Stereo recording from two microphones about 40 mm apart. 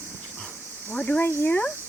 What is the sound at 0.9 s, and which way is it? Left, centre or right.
Speech, left.